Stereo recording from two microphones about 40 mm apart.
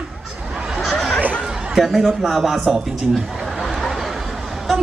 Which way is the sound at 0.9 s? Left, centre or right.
Centre.